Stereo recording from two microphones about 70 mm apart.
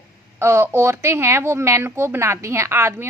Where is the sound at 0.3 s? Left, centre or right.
Right.